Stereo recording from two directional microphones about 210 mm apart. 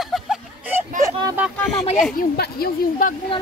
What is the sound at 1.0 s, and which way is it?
Speech, 15° right (ahead or behind).